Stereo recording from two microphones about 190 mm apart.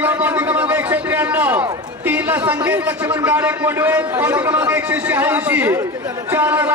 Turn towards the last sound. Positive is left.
turn(degrees=-10)  # may be behind; listen again after turning